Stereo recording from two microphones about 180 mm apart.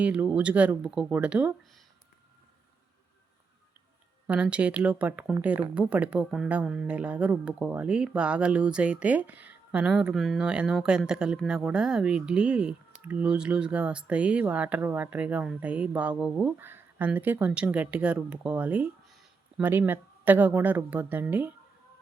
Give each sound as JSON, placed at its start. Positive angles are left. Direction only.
{"t": 0.0, "sound": "speech", "side_deg": -10}
{"t": 4.3, "sound": "speech", "side_deg": -5}